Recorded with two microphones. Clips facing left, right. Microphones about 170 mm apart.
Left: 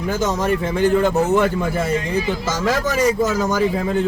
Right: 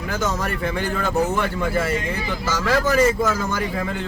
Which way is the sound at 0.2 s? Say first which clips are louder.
Left 4 dB; 20° left (ahead or behind).